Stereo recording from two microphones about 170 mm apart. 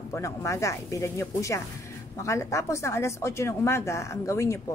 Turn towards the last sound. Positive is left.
turn(degrees=15)  # may be behind; listen again after turning